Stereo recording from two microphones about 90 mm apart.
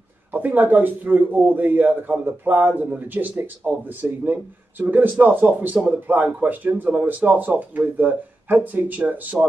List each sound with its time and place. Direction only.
0.3 s a man's voice: 20° right (ahead or behind)